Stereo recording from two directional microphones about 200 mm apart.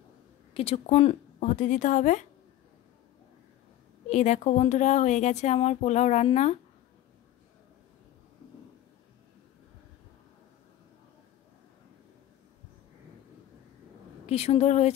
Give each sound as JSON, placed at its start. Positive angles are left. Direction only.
{"t": 0.6, "sound": "a woman's voice", "side_deg": 30}
{"t": 4.1, "sound": "a woman's voice", "side_deg": 35}
{"t": 14.2, "sound": "a woman's voice", "side_deg": 30}